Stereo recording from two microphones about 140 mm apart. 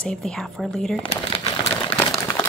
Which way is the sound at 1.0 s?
45° left (ahead or behind).